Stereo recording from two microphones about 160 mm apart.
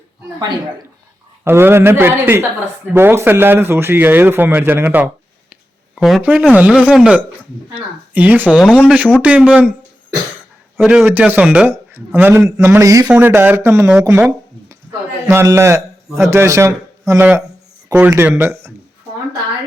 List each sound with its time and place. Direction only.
1.5 s a man's voice: 15° right (ahead or behind)
6.0 s a man's voice: centre (ahead or behind)
10.8 s a man's voice: 5° right (ahead or behind)